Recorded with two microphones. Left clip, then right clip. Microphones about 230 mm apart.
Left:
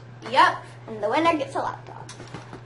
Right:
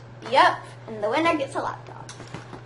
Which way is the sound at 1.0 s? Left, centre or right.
Centre.